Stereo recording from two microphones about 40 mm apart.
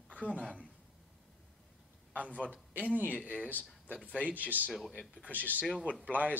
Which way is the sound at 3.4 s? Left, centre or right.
Right.